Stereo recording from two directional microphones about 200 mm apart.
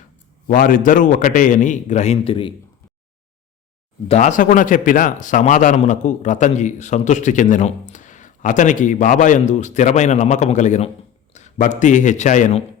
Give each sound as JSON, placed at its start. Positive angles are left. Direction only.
{"t": 0.4, "sound": "speech", "side_deg": 40}
{"t": 4.1, "sound": "speech", "side_deg": 40}